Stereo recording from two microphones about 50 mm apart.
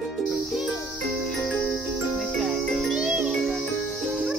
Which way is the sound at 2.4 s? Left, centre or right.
Centre.